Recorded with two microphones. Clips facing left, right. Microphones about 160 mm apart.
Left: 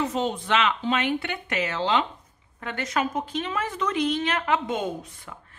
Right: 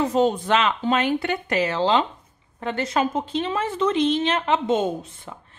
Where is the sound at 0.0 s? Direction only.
40° right (ahead or behind).